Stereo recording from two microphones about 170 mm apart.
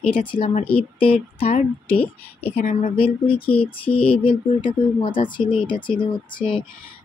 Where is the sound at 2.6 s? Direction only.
55° left (ahead or behind).